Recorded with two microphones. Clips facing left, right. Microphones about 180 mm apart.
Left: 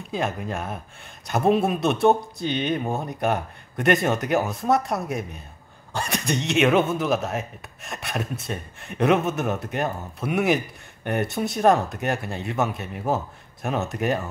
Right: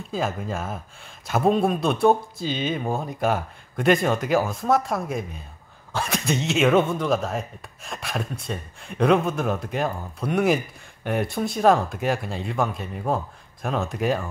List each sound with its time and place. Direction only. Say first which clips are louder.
0.1 s speech: even; centre (ahead or behind)